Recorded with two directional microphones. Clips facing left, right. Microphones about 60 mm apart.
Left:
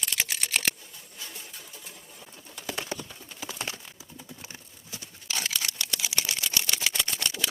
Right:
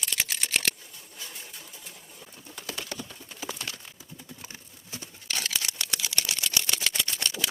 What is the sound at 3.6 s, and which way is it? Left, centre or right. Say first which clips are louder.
Clip-clop: left 3 dB; left.